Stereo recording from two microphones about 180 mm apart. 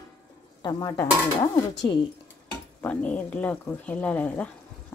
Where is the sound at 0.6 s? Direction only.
20° left (ahead or behind).